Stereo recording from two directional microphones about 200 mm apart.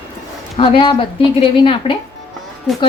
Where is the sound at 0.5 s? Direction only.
25° left (ahead or behind).